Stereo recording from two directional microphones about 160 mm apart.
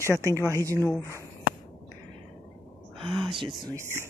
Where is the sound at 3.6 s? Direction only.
20° right (ahead or behind).